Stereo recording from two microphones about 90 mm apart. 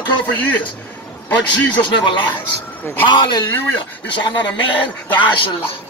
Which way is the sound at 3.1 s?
60° left (ahead or behind).